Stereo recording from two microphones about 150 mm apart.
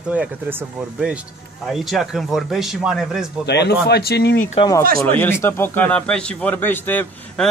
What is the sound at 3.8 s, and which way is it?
Speech, 90° left.